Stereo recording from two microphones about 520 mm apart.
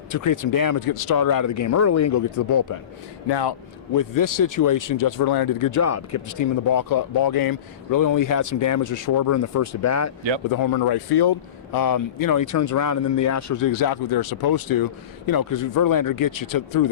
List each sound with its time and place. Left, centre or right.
0.1 s speech: left
3.2 s speech: left
3.9 s speech: left